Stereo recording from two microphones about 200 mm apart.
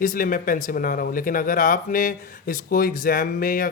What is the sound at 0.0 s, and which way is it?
Speech, 45° left (ahead or behind).